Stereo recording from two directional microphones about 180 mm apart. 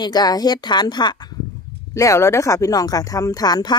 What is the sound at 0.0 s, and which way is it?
A woman's voice, 20° left (ahead or behind).